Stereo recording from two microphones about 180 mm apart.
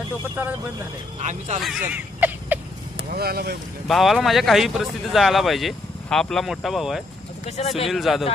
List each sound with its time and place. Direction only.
1.6 s speech: 5° right (ahead or behind)
3.1 s speech: 60° right (ahead or behind)
3.8 s speech: centre (ahead or behind)
7.4 s speech: 35° left (ahead or behind)
7.9 s speech: centre (ahead or behind)